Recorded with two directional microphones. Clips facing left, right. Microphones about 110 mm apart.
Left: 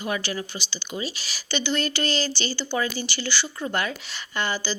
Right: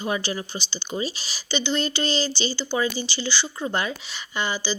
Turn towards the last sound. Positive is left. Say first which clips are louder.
# even
turn(degrees=-15)  # may be behind; listen again after turning